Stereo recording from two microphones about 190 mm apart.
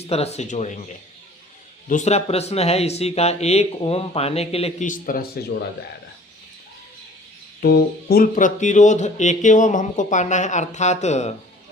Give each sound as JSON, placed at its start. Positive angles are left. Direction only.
{"t": 0.0, "sound": "speech", "side_deg": 35}
{"t": 1.9, "sound": "speech", "side_deg": 35}
{"t": 7.6, "sound": "speech", "side_deg": 55}